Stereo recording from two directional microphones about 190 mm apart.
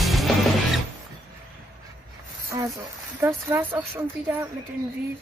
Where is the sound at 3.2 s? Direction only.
10° right (ahead or behind).